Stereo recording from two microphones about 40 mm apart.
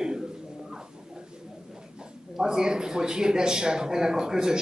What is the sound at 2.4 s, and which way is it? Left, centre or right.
A man's voice, centre.